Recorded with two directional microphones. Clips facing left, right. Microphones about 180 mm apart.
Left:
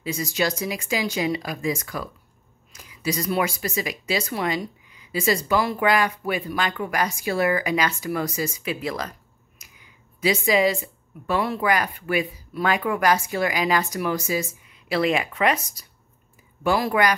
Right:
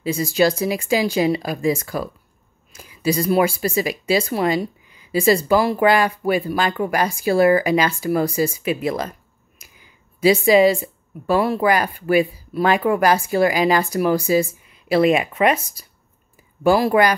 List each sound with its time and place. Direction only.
0.0 s speech: 30° right (ahead or behind)